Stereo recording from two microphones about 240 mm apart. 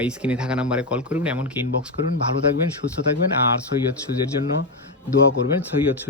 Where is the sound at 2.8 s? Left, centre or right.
Left.